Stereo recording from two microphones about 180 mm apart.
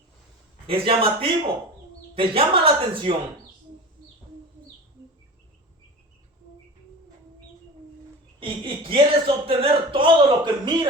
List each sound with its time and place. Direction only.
0.7 s a man's voice: 30° right (ahead or behind)
8.4 s speech: 30° right (ahead or behind)